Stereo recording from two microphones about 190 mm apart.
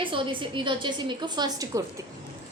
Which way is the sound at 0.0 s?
25° right (ahead or behind).